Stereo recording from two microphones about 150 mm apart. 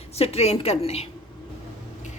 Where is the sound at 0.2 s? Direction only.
45° left (ahead or behind).